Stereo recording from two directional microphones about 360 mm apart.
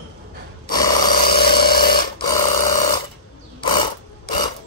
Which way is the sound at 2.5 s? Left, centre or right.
Left.